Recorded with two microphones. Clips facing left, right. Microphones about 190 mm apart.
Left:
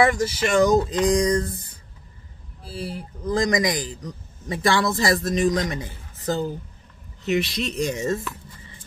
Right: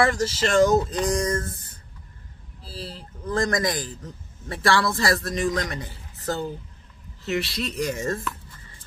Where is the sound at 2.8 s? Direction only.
10° left (ahead or behind).